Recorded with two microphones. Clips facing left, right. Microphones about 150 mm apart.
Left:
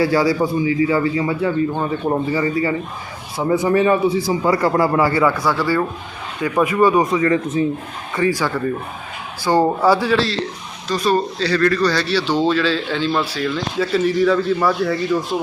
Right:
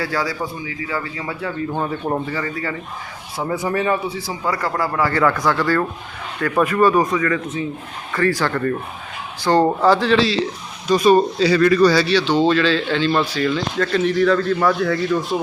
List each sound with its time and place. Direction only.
0.0 s a man's voice: 10° left (ahead or behind)
7.1 s speech: 25° left (ahead or behind)
8.1 s speech: 15° left (ahead or behind)
10.8 s speech: 15° right (ahead or behind)
12.0 s a man's voice: 10° left (ahead or behind)